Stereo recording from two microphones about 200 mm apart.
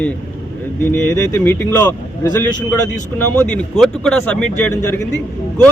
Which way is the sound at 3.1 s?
5° left (ahead or behind).